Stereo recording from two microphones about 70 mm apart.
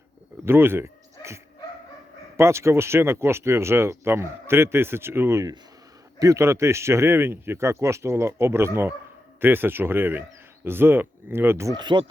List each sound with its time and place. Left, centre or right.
0.4 s dog: right
2.3 s speech: right
6.1 s speech: right
11.7 s speech: right